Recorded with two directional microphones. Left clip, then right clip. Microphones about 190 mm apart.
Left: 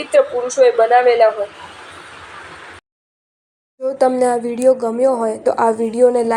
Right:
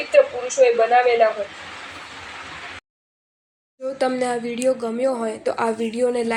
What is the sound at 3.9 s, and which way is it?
A woman's voice, 5° left (ahead or behind).